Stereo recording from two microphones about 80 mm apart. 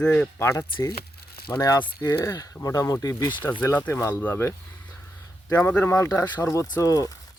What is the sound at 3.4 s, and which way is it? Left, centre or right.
Speech, left.